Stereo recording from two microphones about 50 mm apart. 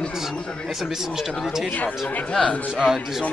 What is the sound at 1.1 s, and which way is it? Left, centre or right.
Speech, centre.